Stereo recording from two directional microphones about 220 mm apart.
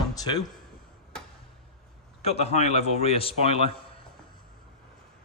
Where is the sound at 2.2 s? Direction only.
30° left (ahead or behind).